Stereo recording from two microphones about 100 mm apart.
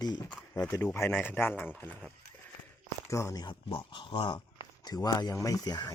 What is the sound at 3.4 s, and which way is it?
Speech, 55° left (ahead or behind).